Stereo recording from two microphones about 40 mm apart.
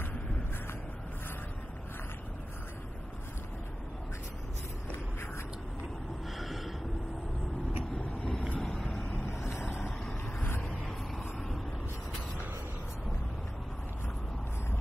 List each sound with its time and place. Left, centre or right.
6.3 s a sound: centre
8.2 s boat: centre
8.5 s vehicle: centre
8.8 s vehicle: left
9.2 s vehicle: left
10.4 s vehicle: left